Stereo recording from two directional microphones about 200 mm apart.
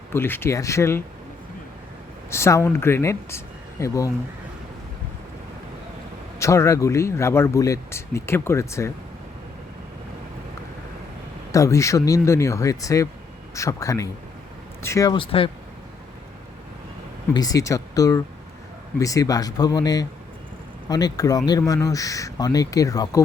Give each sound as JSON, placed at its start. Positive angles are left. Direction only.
{"t": 0.1, "sound": "speech", "side_deg": 10}
{"t": 2.3, "sound": "speech", "side_deg": 15}
{"t": 6.4, "sound": "speech", "side_deg": 15}
{"t": 11.5, "sound": "speech", "side_deg": 15}
{"t": 17.3, "sound": "speech", "side_deg": 20}